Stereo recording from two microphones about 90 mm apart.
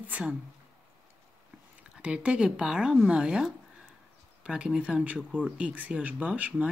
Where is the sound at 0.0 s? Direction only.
15° right (ahead or behind).